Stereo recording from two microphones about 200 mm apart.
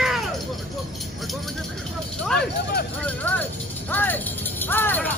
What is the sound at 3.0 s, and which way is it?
Music, 10° left (ahead or behind).